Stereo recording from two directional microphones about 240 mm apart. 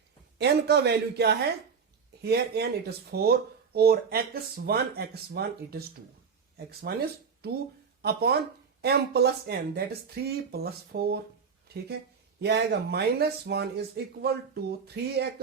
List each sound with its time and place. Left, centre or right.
0.3 s a woman's voice: right